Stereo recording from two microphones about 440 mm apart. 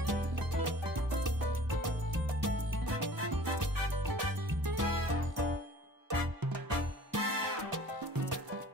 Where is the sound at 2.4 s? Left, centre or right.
Right.